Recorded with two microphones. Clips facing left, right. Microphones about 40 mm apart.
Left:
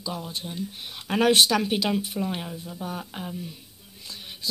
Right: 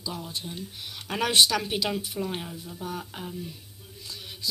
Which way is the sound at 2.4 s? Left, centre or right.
Centre.